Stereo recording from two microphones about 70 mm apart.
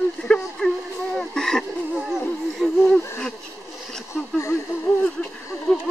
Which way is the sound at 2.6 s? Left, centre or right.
Centre.